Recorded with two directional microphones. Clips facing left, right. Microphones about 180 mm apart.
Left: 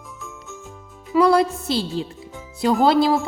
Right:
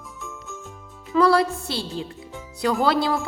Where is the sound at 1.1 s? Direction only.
20° left (ahead or behind).